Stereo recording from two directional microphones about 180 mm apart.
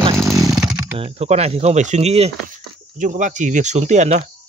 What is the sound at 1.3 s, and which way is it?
Speech, 40° right (ahead or behind).